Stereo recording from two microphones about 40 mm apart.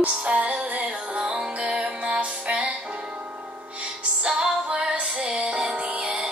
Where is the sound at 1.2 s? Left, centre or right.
Right.